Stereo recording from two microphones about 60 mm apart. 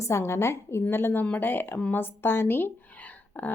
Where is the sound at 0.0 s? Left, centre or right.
Left.